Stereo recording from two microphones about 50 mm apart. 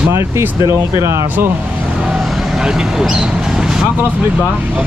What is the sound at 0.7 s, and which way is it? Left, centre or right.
Speech, right.